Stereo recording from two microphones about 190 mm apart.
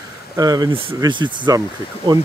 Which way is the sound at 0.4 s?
20° right (ahead or behind).